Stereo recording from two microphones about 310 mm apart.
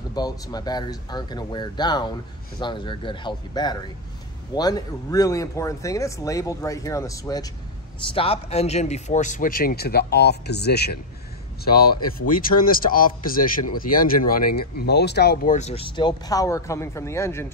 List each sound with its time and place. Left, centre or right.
0.1 s speech: centre